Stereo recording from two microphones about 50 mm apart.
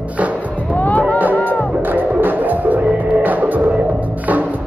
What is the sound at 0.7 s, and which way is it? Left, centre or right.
Music, left.